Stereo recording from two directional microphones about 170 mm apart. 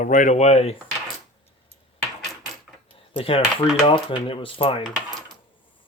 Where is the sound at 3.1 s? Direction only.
30° left (ahead or behind).